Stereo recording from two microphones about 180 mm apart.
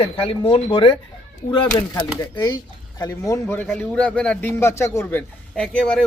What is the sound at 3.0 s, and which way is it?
A man's voice, 20° left (ahead or behind).